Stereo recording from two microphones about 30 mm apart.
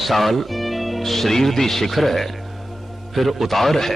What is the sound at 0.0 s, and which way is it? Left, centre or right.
Speech, centre.